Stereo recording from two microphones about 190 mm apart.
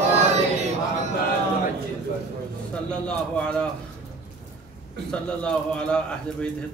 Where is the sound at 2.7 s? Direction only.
5° left (ahead or behind).